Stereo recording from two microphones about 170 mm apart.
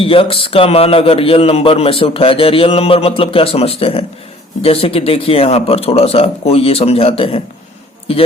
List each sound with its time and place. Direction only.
0.0 s a man's voice: 35° left (ahead or behind)